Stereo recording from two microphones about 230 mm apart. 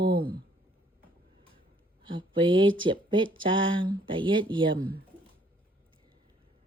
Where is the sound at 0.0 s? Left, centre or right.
Right.